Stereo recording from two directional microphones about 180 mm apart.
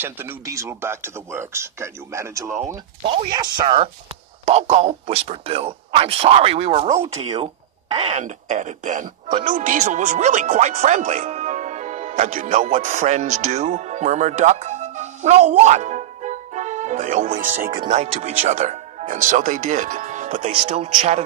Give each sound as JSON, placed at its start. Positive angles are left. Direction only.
{"t": 0.0, "sound": "speech", "side_deg": -10}